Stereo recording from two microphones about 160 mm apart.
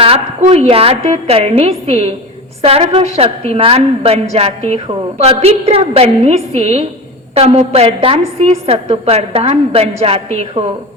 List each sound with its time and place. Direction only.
0.0 s a woman's voice: 40° right (ahead or behind)